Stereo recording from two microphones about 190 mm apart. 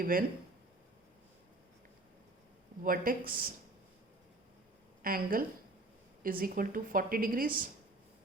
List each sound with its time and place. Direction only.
0.0 s a woman's voice: 50° right (ahead or behind)
2.8 s a woman's voice: 50° right (ahead or behind)
5.0 s a woman's voice: 50° right (ahead or behind)